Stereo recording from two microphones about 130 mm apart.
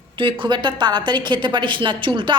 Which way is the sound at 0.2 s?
40° right (ahead or behind).